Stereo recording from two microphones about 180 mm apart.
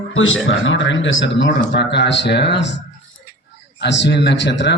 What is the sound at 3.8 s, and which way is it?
Speech, 75° left (ahead or behind).